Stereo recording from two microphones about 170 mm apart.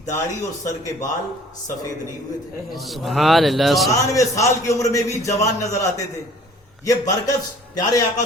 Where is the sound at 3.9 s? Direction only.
20° left (ahead or behind).